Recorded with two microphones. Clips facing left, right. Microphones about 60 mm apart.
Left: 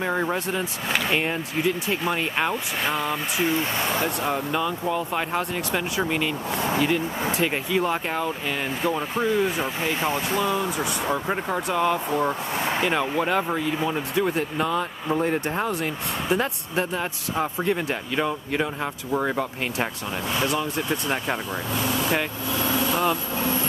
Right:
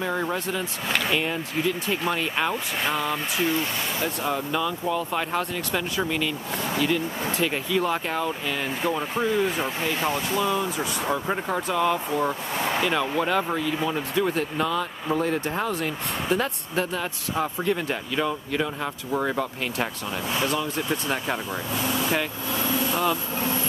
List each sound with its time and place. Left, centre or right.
0.0 s speech: centre
9.8 s speech: left
10.4 s speech: centre